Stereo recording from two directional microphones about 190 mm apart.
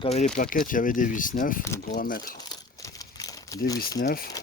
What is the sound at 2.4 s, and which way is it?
Crumpling, 20° left (ahead or behind).